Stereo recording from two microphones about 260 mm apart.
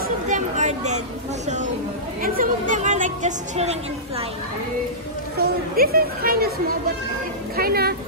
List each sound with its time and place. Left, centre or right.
0.3 s a sound: right
2.7 s speech: right
5.4 s speech: right
7.5 s speech: right